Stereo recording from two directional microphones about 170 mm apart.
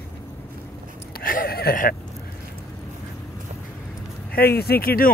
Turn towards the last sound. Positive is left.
turn(degrees=60)  # may be behind; listen again after turning